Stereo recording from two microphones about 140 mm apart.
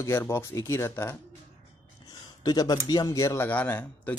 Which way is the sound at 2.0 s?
25° left (ahead or behind).